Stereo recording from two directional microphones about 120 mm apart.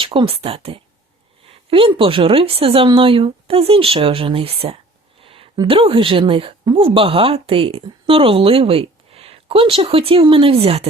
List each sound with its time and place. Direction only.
0.0 s speech: 45° right (ahead or behind)
5.2 s a sound: 50° right (ahead or behind)
5.6 s speech: 50° right (ahead or behind)